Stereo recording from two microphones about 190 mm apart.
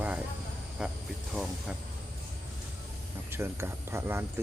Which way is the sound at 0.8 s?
5° right (ahead or behind).